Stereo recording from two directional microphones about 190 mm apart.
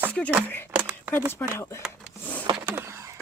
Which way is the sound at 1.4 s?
10° left (ahead or behind).